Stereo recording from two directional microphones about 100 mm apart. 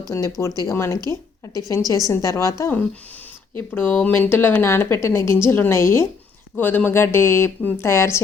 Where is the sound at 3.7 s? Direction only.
20° left (ahead or behind).